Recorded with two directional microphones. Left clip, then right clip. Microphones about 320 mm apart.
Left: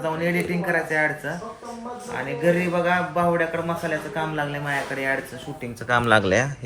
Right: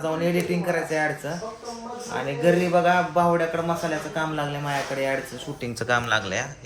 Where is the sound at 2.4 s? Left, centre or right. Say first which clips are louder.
Right 2 dB; centre.